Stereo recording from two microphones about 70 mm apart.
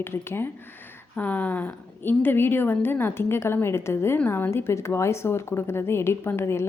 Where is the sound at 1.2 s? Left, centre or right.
Left.